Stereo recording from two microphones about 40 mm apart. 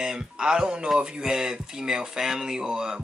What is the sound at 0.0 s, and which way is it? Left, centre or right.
Speech, centre.